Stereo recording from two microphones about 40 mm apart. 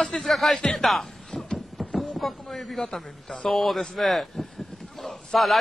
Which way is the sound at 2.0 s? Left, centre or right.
Centre.